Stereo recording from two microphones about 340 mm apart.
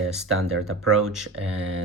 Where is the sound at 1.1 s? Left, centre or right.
Centre.